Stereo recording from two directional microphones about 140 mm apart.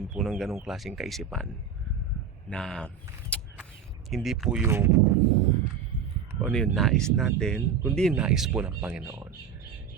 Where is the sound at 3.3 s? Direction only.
10° left (ahead or behind).